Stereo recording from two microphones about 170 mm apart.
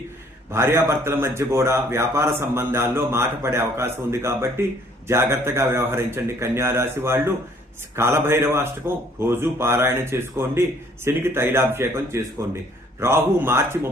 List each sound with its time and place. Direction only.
0.5 s a man's voice: 15° right (ahead or behind)